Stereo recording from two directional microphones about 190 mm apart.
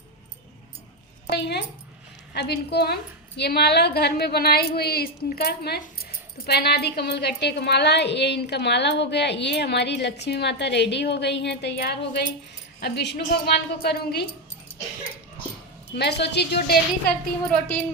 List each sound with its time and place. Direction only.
1.3 s a woman's voice: 60° left (ahead or behind)
16.0 s a woman's voice: 60° left (ahead or behind)